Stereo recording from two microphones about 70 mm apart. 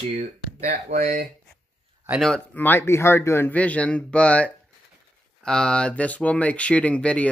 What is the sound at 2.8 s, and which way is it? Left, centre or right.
Speech, left.